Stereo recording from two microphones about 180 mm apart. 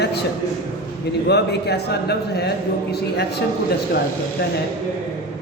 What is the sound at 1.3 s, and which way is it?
A man's voice, 65° left (ahead or behind).